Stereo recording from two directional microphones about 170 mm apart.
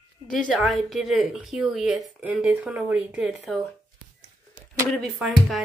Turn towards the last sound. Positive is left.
turn(degrees=-5)  # may be behind; listen again after turning